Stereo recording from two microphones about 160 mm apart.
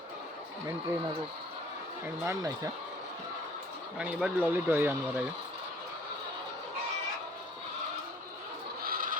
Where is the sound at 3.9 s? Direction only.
10° right (ahead or behind).